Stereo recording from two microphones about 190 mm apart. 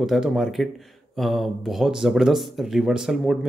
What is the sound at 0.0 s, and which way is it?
Speech, centre (ahead or behind).